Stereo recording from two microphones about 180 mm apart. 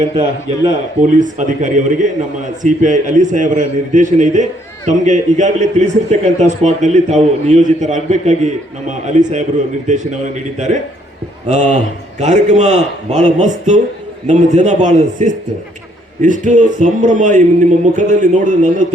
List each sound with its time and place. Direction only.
1.0 s a man's voice: 45° right (ahead or behind)